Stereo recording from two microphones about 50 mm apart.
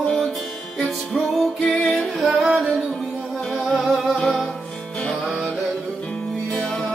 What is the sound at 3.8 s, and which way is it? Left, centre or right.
Music, centre.